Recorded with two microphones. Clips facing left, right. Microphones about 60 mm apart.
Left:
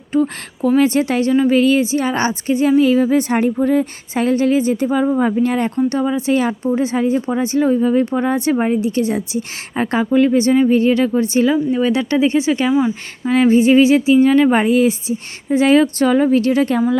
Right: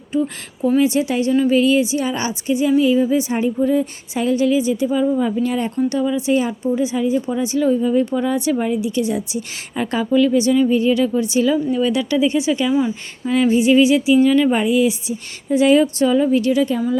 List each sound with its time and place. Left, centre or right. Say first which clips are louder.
0.1 s a woman's voice: left 4 dB; left